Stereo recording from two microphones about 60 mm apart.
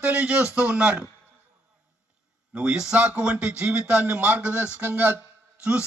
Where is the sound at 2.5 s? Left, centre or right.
Centre; by 5.2 s right.